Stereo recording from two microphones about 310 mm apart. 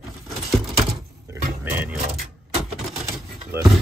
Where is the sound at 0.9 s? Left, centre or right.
Centre.